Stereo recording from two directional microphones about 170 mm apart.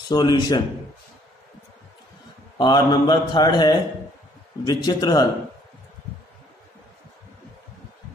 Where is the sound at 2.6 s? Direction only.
25° left (ahead or behind).